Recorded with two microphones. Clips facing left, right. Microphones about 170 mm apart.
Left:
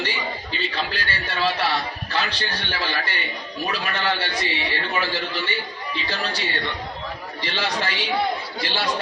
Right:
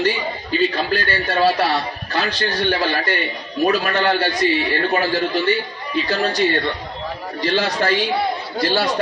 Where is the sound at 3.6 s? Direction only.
45° right (ahead or behind).